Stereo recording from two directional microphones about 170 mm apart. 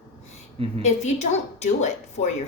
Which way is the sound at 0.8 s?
40° left (ahead or behind).